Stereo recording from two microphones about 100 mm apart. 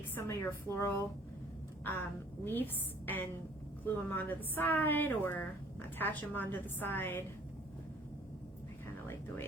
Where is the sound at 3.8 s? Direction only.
20° left (ahead or behind).